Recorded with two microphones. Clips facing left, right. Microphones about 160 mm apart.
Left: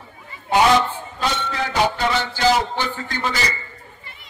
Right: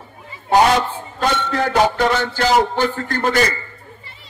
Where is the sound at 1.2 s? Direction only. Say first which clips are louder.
Right 5 dB; 50° right (ahead or behind).